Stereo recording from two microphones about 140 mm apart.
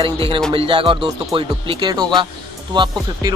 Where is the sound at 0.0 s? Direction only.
40° right (ahead or behind).